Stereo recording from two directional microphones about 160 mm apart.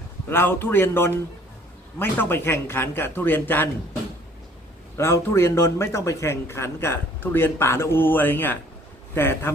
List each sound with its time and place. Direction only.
0.3 s a man's voice: 15° left (ahead or behind)
4.9 s a man's voice: 15° left (ahead or behind)